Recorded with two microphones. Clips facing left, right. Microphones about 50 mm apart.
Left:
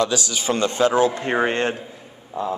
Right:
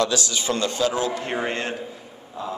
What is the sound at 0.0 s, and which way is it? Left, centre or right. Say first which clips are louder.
A man's voice: left 1 dB; centre.